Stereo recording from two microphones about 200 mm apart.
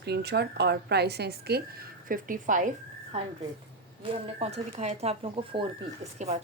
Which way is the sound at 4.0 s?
30° right (ahead or behind).